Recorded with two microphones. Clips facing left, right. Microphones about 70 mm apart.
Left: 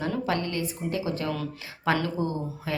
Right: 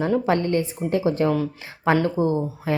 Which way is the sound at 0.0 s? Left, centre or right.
Right.